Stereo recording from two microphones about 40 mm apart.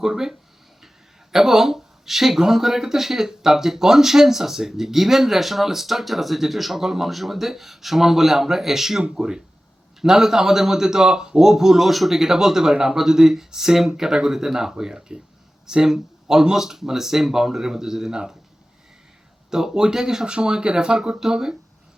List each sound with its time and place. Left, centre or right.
0.0 s speech: centre
19.5 s speech: centre